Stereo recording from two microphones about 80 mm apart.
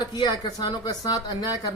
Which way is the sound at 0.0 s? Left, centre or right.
Left.